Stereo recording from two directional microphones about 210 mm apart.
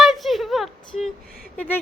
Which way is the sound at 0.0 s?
Centre (ahead or behind).